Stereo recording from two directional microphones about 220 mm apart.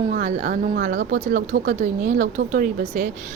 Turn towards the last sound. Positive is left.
turn(degrees=-40)  # may be behind; listen again after turning